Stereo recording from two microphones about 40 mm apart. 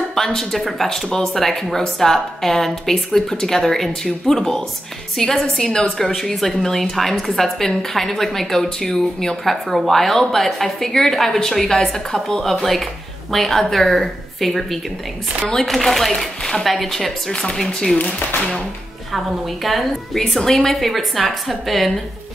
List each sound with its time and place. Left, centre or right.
0.1 s a woman's voice: centre
5.9 s a woman's voice: centre
9.4 s a woman's voice: centre
12.4 s a woman's voice: centre
17.3 s a woman's voice: left
19.1 s a woman's voice: centre
20.3 s a woman's voice: centre